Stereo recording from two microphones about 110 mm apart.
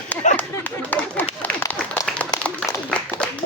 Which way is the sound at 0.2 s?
90° left.